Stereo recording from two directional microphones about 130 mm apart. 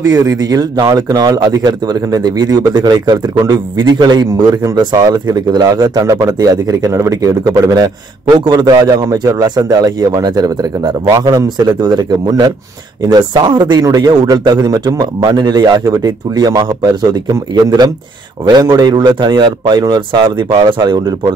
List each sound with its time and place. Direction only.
0.0 s speech: 25° right (ahead or behind)